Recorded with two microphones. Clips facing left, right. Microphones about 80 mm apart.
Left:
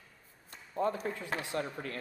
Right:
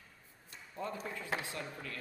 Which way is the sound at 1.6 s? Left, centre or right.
Left.